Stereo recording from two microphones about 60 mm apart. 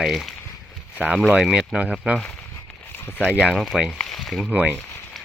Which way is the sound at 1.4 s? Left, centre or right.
Centre.